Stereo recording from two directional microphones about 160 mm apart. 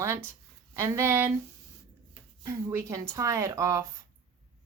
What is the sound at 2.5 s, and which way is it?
A woman's voice, 20° right (ahead or behind).